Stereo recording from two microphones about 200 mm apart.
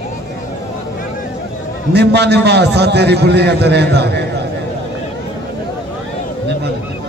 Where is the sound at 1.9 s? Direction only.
55° right (ahead or behind).